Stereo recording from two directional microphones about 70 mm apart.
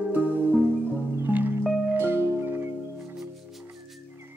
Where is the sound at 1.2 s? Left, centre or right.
Right.